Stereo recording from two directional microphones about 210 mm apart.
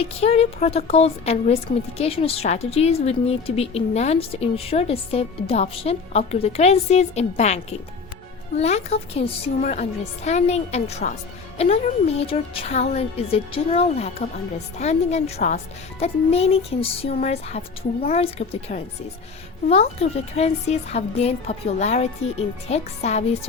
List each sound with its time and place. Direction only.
0.0 s a woman's voice: 30° left (ahead or behind)